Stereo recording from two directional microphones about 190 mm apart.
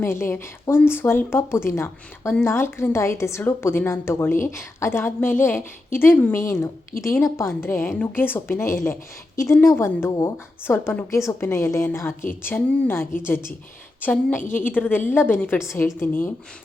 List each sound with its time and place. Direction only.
0.0 s a woman's voice: 10° left (ahead or behind)